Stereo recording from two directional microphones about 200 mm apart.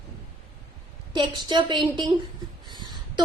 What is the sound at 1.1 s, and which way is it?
Speech, 25° right (ahead or behind).